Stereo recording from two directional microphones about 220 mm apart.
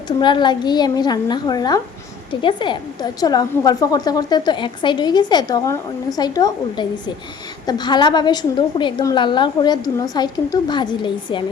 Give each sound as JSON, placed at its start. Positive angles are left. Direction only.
{"t": 0.2, "sound": "a woman's voice", "side_deg": 20}